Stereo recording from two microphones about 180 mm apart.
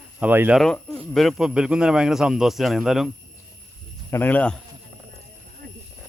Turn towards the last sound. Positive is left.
turn(degrees=10)  # may be behind; listen again after turning